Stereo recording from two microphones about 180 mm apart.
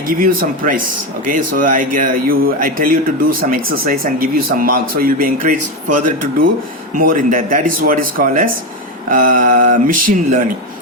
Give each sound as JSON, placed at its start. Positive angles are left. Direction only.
{"t": 0.1, "sound": "speech", "side_deg": -50}